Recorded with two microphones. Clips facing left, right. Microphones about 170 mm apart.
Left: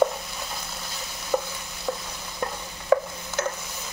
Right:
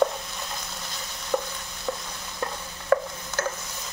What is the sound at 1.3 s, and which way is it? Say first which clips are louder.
Stir: left 1 dB; 10° left (ahead or behind).